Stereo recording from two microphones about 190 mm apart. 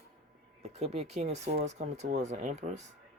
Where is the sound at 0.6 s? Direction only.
35° right (ahead or behind).